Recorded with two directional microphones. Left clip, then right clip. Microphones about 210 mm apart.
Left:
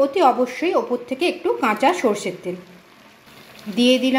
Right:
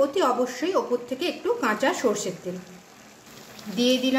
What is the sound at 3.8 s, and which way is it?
Speech, 15° left (ahead or behind).